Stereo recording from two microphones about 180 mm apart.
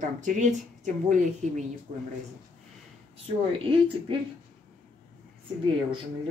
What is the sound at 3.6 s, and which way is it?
Speech, 30° right (ahead or behind).